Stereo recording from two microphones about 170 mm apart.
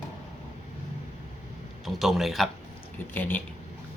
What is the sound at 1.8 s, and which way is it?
Speech, centre (ahead or behind).